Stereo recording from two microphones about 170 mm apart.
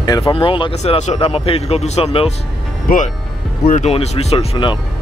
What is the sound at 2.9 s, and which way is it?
Speech, 60° left (ahead or behind).